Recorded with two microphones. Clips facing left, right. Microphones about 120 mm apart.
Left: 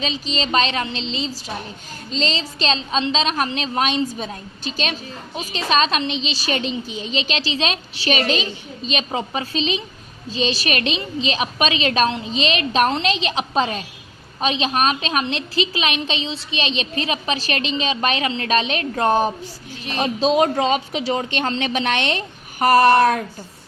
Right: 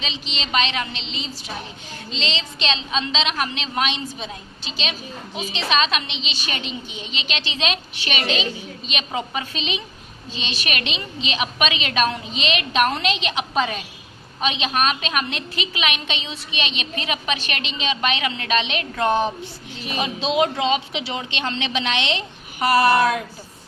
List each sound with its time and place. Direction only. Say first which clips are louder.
0.0 s a woman's voice: left 6 dB; 40° left (ahead or behind)